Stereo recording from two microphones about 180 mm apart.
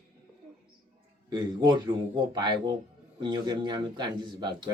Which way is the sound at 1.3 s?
25° right (ahead or behind).